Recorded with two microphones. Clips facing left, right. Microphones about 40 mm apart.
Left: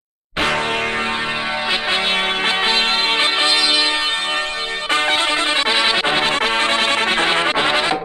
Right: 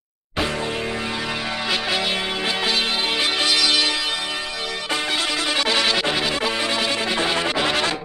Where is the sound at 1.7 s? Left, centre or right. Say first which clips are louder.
Left 3 dB; left.